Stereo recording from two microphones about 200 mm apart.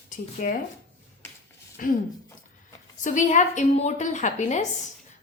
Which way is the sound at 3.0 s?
40° left (ahead or behind).